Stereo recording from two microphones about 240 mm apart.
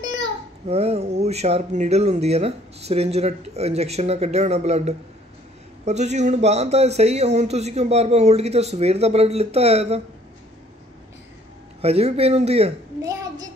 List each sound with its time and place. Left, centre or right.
0.0 s a child's voice: centre
11.8 s a child's voice: right
13.0 s a child's voice: centre